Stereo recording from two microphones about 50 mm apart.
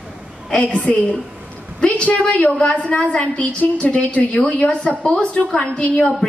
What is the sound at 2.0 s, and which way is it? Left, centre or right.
A woman's voice, left.